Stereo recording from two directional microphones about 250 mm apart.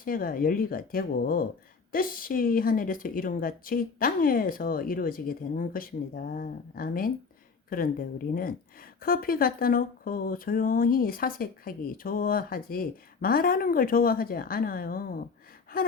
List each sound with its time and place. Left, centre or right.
0.0 s speech: left
15.7 s gasp: left